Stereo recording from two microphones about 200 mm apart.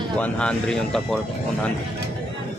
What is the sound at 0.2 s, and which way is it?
Speech, 5° left (ahead or behind).